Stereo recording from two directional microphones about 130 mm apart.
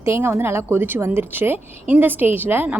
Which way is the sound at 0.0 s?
20° right (ahead or behind).